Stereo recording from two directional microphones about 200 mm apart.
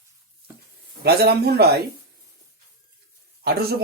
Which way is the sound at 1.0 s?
50° right (ahead or behind).